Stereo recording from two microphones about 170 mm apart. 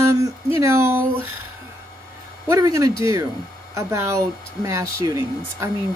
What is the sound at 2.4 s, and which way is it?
Speech, 15° right (ahead or behind).